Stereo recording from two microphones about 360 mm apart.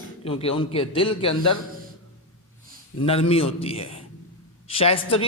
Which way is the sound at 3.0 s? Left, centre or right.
Centre.